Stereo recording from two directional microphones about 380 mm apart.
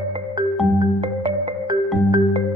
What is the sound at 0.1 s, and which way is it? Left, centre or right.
Music, centre.